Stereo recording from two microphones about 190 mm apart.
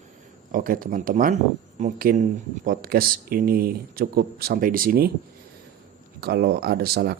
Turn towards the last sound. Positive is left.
turn(degrees=-55)  # may be behind; listen again after turning